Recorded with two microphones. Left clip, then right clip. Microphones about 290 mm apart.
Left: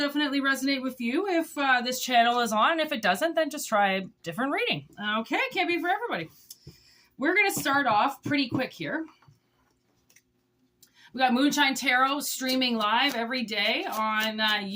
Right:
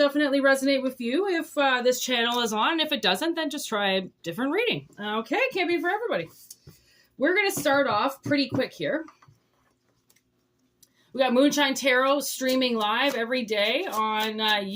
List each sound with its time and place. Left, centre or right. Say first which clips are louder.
0.0 s speech: right 5 dB; centre
7.2 s speech: right 1 dB; centre
11.1 s speech: right 3 dB; centre